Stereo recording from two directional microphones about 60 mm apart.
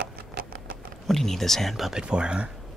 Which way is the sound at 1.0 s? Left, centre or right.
Centre.